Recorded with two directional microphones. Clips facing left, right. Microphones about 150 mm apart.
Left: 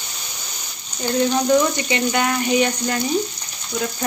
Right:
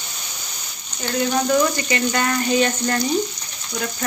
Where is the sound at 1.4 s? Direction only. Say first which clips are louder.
Left 2 dB; 15° left (ahead or behind).